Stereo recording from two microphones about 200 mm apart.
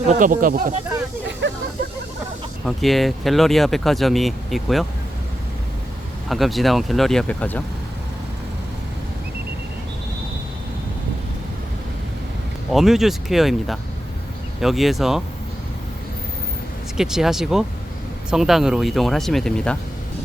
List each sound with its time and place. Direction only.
0.1 s speech: 40° right (ahead or behind)
2.6 s speech: centre (ahead or behind)
6.2 s speech: centre (ahead or behind)
12.7 s speech: centre (ahead or behind)
17.0 s speech: 5° right (ahead or behind)